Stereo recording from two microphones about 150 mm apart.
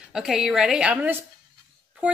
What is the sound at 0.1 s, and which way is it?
A woman's voice, 5° right (ahead or behind).